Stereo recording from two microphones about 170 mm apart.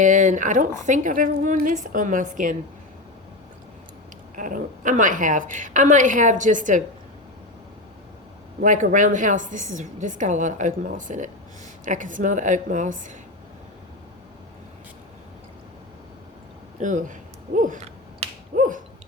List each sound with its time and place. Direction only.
0.0 s a woman's voice: 50° right (ahead or behind)
4.4 s a woman's voice: 50° right (ahead or behind)
8.6 s a woman's voice: 50° right (ahead or behind)
16.8 s finger snapping: 50° right (ahead or behind)